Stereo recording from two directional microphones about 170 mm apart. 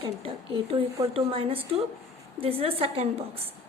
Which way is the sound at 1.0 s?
35° right (ahead or behind).